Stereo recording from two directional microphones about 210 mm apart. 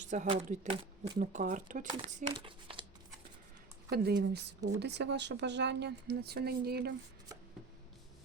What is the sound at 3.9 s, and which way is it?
Speech, 50° right (ahead or behind).